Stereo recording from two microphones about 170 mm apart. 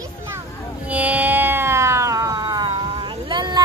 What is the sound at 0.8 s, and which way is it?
Music, 10° right (ahead or behind).